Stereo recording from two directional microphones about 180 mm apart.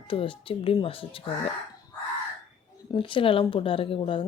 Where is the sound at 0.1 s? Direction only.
30° left (ahead or behind).